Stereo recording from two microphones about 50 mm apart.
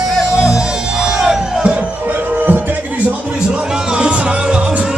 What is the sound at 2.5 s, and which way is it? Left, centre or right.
Music, right.